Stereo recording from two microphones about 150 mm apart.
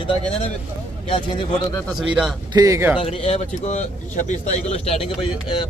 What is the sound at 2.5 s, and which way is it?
Speech, 20° right (ahead or behind).